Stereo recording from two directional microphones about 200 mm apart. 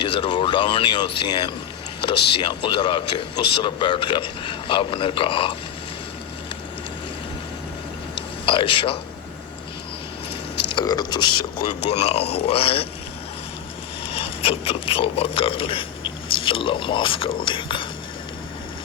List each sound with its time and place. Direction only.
0.0 s a man's voice: 25° left (ahead or behind)
8.4 s a man's voice: 25° left (ahead or behind)
10.7 s a man's voice: 20° left (ahead or behind)
14.1 s speech: 30° left (ahead or behind)